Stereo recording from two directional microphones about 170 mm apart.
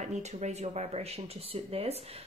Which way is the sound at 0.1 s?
40° right (ahead or behind).